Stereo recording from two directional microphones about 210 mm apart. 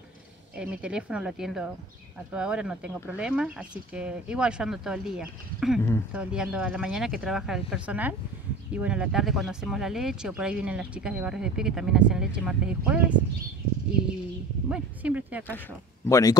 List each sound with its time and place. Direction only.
0.6 s speech: 5° right (ahead or behind)
14.7 s speech: 5° right (ahead or behind)
16.1 s speech: 15° left (ahead or behind)